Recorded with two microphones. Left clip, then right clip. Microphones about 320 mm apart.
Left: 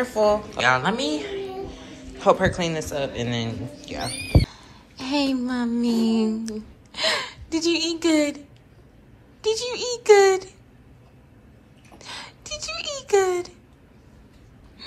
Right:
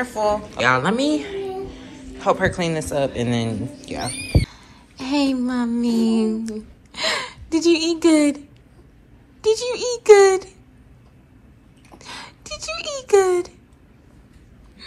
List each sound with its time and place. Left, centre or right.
0.0 s a woman's voice: centre
9.4 s a woman's voice: centre
12.0 s a sound: centre